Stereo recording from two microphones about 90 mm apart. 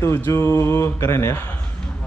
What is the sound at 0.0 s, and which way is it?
Speech, 30° left (ahead or behind).